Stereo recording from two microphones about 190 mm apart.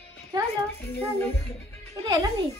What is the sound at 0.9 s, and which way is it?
Music, 10° left (ahead or behind).